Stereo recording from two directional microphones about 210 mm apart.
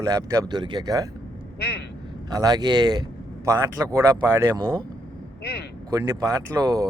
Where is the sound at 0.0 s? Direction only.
15° right (ahead or behind).